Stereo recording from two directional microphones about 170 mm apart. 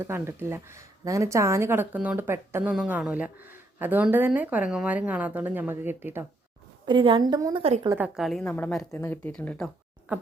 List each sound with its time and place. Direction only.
0.0 s speech: 15° right (ahead or behind)
6.8 s a woman's voice: 30° right (ahead or behind)
7.9 s a woman's voice: 10° right (ahead or behind)